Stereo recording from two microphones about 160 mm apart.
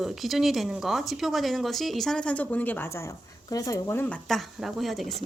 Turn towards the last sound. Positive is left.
turn(degrees=0)  # may be behind; listen again after turning